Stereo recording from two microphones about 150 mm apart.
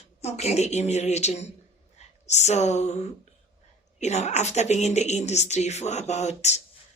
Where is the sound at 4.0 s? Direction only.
50° left (ahead or behind).